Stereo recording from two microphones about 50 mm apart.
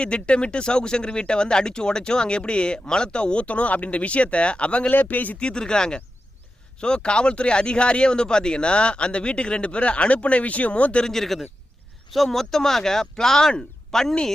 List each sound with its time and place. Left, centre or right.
0.0 s speech: left
4.9 s speech: left
5.4 s speech: centre
11.0 s speech: centre